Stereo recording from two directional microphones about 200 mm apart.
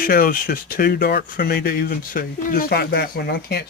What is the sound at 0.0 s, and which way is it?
Speech, 45° left (ahead or behind).